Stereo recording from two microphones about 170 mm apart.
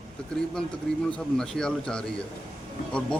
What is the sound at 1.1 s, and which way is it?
A man's voice, 5° left (ahead or behind).